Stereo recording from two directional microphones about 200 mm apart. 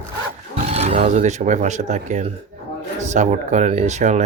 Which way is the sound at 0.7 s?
30° right (ahead or behind).